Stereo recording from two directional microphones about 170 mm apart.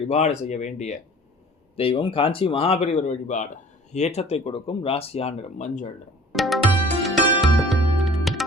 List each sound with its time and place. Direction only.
0.1 s speech: 40° left (ahead or behind)
6.3 s music: centre (ahead or behind)